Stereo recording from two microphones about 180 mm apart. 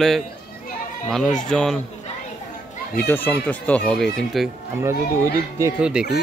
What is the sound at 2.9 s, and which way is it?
A child's voice, 10° left (ahead or behind).